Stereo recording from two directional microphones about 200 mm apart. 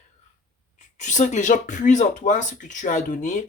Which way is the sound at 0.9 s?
35° left (ahead or behind).